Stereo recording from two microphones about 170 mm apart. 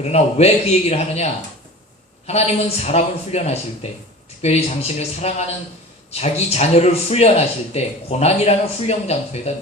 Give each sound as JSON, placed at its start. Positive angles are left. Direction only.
{"t": 0.0, "sound": "a man's voice", "side_deg": 40}